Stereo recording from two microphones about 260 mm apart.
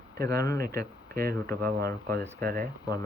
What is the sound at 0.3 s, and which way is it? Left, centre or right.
Speech, centre.